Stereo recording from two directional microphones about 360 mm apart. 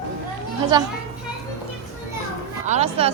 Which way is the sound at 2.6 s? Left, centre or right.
Centre.